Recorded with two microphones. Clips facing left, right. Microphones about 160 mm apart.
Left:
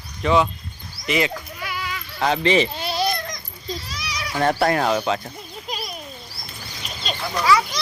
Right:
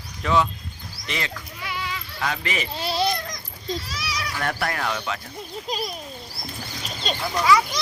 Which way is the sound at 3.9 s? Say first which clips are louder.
Right 1 dB; 5° right (ahead or behind).